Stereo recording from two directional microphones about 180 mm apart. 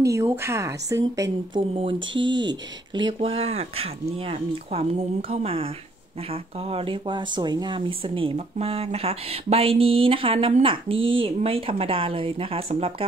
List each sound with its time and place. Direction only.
0.1 s speech: 15° right (ahead or behind)
2.0 s speech: 90° right
2.3 s speech: 25° right (ahead or behind)